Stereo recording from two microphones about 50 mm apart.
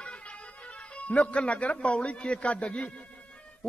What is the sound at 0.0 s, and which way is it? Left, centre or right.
Speech, left.